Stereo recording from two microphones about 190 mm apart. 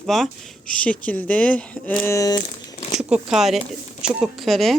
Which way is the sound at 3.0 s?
5° right (ahead or behind).